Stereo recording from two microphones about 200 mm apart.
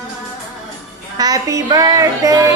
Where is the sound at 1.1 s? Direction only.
20° right (ahead or behind).